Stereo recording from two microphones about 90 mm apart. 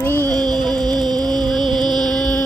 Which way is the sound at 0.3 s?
50° right (ahead or behind).